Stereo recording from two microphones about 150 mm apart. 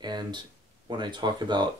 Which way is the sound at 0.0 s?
30° right (ahead or behind).